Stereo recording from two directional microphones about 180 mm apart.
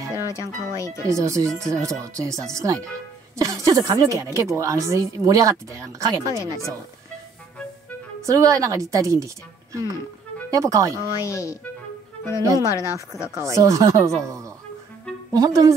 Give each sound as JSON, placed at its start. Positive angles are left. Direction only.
{"t": 0.1, "sound": "speech", "side_deg": 15}
{"t": 1.0, "sound": "speech", "side_deg": -15}
{"t": 8.3, "sound": "speech", "side_deg": -20}
{"t": 11.2, "sound": "speech", "side_deg": 15}
{"t": 12.4, "sound": "speech", "side_deg": -20}
{"t": 15.3, "sound": "speech", "side_deg": -20}